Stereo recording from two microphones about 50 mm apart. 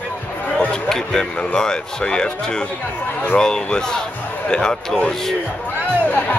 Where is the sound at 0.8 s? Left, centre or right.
Centre.